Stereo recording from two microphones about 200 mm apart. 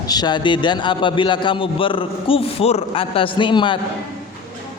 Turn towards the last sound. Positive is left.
turn(degrees=25)  # may be behind; listen again after turning